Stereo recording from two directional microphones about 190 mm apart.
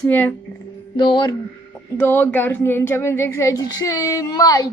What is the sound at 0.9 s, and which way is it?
Speech, 25° left (ahead or behind).